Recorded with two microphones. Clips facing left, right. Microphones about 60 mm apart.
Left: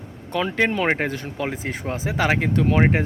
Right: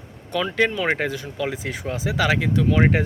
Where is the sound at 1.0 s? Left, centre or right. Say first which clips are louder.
Even; left.